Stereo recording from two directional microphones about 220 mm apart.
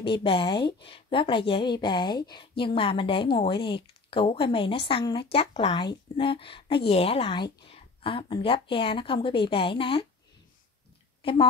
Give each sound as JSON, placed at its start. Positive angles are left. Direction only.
{"t": 0.0, "sound": "speech", "side_deg": 25}